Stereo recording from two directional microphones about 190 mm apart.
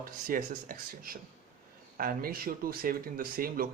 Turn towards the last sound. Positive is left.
turn(degrees=-50)  # may be behind; listen again after turning